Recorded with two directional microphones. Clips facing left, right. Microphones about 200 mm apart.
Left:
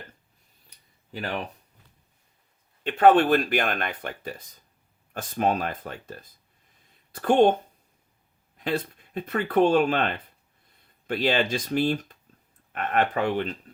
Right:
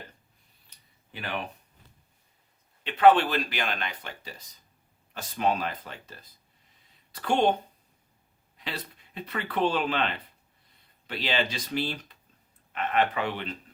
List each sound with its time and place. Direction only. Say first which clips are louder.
1.1 s speech: left 3 dB; 40° left (ahead or behind)
2.8 s speech: left 2 dB; 45° left (ahead or behind)
8.5 s speech: left 10 dB; 50° left (ahead or behind)